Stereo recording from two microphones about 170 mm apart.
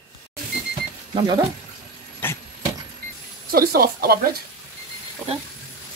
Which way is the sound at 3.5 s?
65° right (ahead or behind).